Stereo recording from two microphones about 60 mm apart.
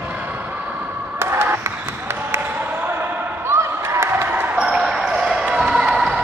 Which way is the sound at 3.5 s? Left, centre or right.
Right.